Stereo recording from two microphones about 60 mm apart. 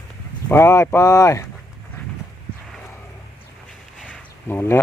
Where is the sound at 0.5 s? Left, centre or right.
Left.